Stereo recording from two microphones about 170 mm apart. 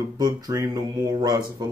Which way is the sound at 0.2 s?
20° right (ahead or behind).